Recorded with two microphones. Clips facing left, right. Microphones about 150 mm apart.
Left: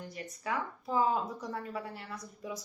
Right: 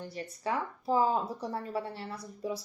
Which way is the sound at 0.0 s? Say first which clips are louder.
Right 4 dB; 30° right (ahead or behind).